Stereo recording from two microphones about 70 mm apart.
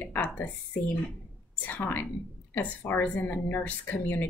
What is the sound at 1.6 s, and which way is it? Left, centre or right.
A woman's voice, left.